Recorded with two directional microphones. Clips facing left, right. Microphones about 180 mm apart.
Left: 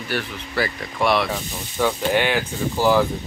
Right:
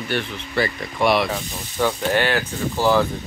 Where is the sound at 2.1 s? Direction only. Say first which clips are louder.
Even; 15° left (ahead or behind).